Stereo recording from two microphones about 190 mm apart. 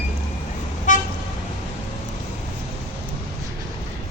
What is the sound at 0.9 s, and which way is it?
Toot, 40° left (ahead or behind).